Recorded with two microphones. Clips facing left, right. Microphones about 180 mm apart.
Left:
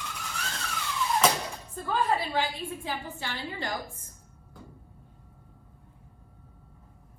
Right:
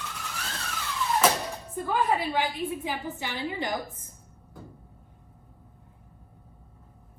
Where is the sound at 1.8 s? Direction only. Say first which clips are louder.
Right 1 dB; 15° right (ahead or behind).